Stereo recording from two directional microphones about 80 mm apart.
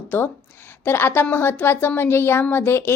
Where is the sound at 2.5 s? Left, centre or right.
Left.